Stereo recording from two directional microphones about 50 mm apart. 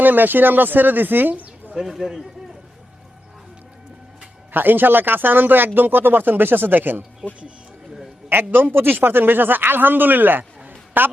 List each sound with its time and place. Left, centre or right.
0.0 s a man's voice: right
1.7 s a man's voice: centre
4.5 s speech: right
7.2 s speech: right
8.3 s a man's voice: right
10.6 s a sound: right